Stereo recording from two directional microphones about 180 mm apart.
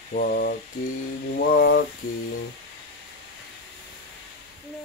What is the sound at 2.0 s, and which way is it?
Mantra, 45° left (ahead or behind).